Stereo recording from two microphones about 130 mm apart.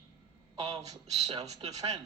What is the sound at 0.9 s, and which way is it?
Speech, 55° right (ahead or behind).